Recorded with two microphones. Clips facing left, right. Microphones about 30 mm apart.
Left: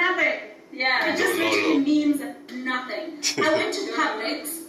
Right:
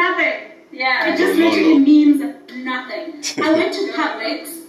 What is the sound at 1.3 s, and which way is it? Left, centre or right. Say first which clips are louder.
A woman's voice: right 9 dB; right.